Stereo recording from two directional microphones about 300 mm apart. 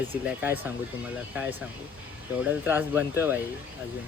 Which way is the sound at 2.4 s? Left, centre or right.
Centre.